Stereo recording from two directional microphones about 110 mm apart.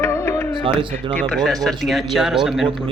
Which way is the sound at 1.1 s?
5° left (ahead or behind).